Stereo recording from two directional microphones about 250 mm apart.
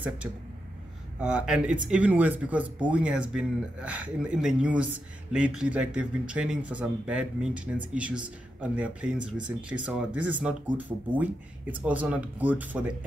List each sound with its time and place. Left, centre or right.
0.2 s speech: centre